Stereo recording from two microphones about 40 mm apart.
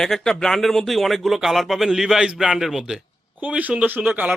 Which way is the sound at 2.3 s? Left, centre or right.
Right.